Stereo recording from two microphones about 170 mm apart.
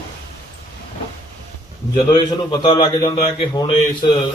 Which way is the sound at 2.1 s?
25° left (ahead or behind).